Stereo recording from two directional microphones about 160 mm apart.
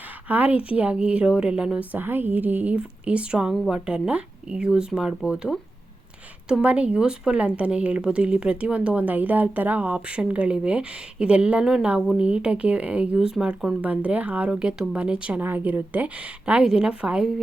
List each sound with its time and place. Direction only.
0.3 s a woman's voice: 10° right (ahead or behind)